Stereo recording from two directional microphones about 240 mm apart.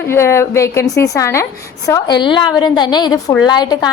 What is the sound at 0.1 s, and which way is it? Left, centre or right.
A woman's voice, centre.